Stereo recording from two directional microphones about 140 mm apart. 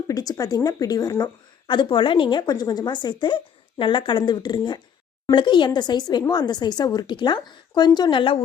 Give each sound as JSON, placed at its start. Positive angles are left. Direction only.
{"t": 0.1, "sound": "a woman's voice", "side_deg": 25}